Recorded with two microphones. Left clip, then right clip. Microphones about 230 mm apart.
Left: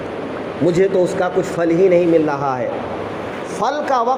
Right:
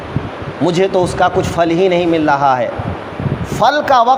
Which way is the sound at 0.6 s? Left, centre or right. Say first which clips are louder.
Right 2 dB; right.